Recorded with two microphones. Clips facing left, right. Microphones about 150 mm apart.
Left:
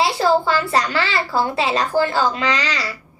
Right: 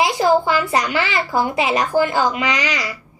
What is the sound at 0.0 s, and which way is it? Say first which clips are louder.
A woman's voice: right 1 dB; 15° right (ahead or behind).